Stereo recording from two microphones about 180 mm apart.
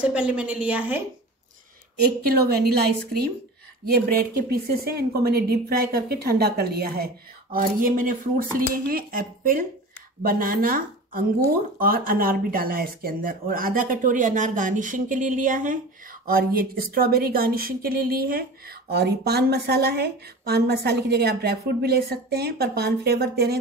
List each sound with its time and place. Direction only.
0.0 s a woman's voice: 5° right (ahead or behind)
2.0 s speech: 60° right (ahead or behind)